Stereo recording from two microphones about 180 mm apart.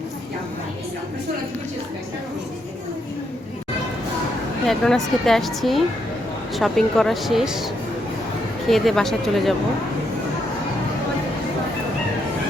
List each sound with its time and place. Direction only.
4.6 s speech: centre (ahead or behind)
8.7 s speech: centre (ahead or behind)